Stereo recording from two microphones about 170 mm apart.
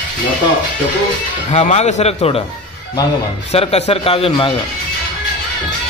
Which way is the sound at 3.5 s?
40° left (ahead or behind).